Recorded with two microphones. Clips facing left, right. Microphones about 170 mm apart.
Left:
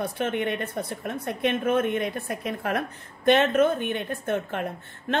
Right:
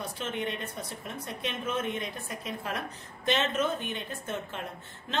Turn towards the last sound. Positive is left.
turn(degrees=55)  # may be behind; listen again after turning